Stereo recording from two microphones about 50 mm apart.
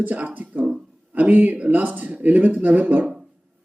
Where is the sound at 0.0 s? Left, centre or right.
Right.